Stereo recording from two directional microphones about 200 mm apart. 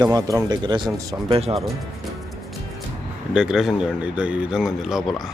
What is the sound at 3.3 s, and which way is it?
A man's voice, 5° right (ahead or behind).